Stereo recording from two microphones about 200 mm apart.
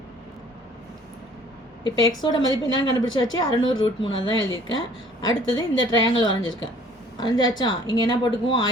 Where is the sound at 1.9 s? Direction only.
20° left (ahead or behind).